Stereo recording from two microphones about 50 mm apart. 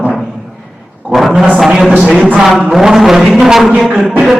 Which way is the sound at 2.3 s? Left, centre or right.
Centre.